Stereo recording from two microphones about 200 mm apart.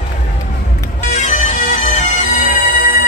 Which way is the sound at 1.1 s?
35° left (ahead or behind).